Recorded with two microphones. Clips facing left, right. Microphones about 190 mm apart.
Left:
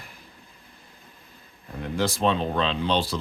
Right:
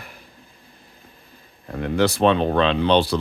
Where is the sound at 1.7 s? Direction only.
65° right (ahead or behind).